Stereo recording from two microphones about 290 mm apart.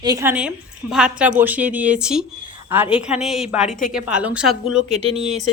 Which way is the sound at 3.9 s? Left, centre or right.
Centre.